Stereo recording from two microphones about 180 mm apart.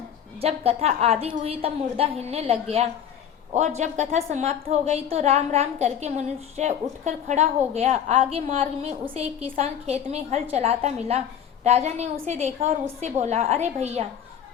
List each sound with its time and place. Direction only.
0.3 s a woman's voice: 35° right (ahead or behind)